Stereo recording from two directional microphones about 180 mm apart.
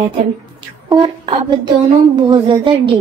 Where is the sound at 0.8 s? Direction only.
25° right (ahead or behind).